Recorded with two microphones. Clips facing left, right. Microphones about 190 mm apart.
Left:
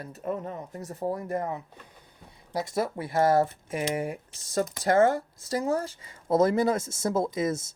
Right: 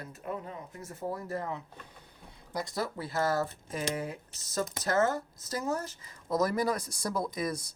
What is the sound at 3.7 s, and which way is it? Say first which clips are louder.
Speech: left 5 dB; 10° left (ahead or behind).